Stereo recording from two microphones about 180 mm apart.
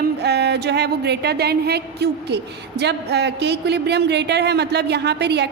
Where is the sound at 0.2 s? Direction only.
70° right (ahead or behind).